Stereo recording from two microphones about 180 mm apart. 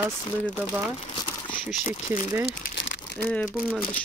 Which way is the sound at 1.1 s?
25° left (ahead or behind).